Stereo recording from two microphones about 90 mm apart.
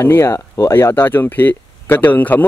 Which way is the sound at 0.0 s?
30° left (ahead or behind).